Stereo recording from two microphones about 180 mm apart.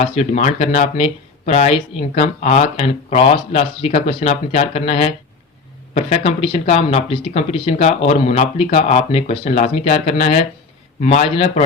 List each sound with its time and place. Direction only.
0.0 s speech: 35° left (ahead or behind)